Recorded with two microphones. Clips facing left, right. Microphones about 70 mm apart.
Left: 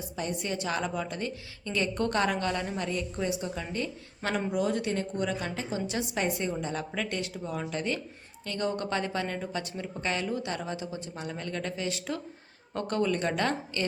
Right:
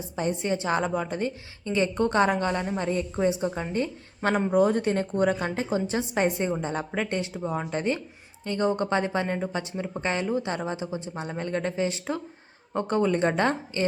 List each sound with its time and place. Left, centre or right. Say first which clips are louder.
0.2 s a woman's voice: right 6 dB; right